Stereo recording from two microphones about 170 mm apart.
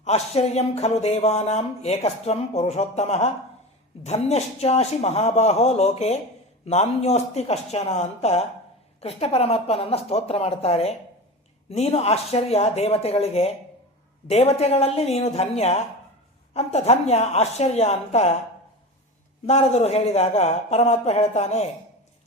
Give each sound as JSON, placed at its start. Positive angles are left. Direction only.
{"t": 0.0, "sound": "speech", "side_deg": 40}
{"t": 19.5, "sound": "speech", "side_deg": 40}